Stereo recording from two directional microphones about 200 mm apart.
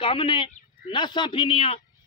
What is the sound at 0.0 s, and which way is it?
A man's voice, 25° left (ahead or behind).